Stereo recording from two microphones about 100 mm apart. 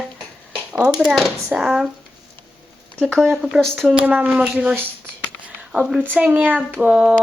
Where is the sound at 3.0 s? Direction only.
5° left (ahead or behind).